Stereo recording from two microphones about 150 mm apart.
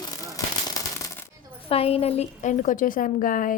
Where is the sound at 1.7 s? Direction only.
40° left (ahead or behind); by 3.6 s 65° left (ahead or behind).